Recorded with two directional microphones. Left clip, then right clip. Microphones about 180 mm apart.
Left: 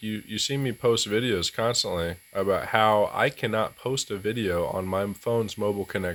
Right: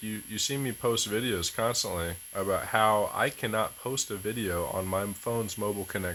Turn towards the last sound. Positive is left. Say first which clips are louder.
# left 5 dB
turn(degrees=20)  # may be behind; listen again after turning